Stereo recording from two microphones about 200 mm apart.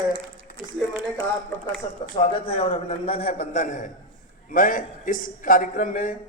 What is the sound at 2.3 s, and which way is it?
A man's voice, 30° left (ahead or behind).